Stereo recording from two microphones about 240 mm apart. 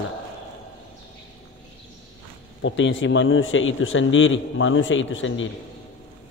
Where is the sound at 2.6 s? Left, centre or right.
Left.